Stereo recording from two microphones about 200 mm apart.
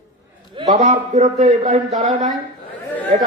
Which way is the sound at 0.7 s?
35° right (ahead or behind).